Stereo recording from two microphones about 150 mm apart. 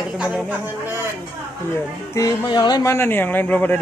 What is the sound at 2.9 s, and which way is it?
Speech, 15° left (ahead or behind).